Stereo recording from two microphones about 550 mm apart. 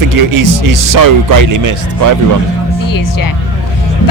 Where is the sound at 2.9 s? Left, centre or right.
Left.